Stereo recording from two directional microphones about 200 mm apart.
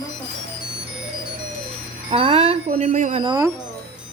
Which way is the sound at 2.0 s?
30° right (ahead or behind).